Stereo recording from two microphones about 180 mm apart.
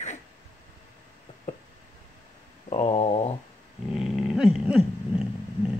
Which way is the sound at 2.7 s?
35° left (ahead or behind).